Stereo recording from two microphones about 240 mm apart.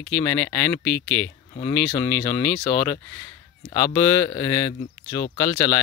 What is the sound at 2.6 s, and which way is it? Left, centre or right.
Speech, left.